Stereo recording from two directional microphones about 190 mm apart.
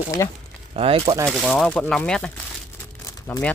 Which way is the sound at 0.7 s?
30° right (ahead or behind).